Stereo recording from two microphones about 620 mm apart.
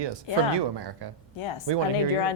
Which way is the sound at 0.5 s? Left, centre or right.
Right.